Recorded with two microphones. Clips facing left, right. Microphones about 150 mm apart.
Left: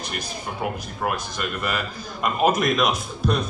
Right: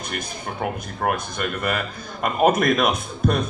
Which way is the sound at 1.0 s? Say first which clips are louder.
Right 3 dB; 50° right (ahead or behind).